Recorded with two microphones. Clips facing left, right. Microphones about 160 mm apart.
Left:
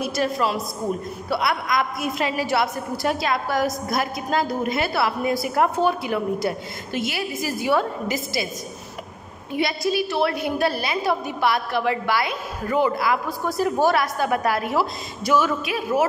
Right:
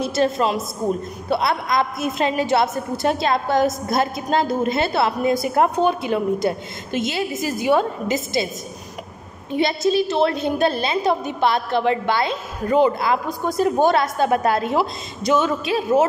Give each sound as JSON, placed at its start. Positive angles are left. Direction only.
{"t": 0.0, "sound": "a woman's voice", "side_deg": -25}
{"t": 9.5, "sound": "a woman's voice", "side_deg": -25}